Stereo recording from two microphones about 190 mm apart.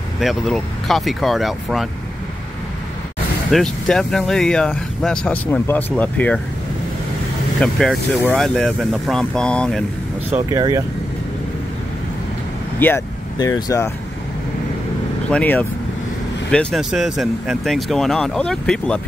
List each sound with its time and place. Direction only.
0.2 s speech: centre (ahead or behind)
3.5 s speech: 5° left (ahead or behind)
7.6 s speech: 5° left (ahead or behind)
10.5 s speech: 15° right (ahead or behind)
12.7 s speech: 10° left (ahead or behind)
15.2 s speech: 5° left (ahead or behind)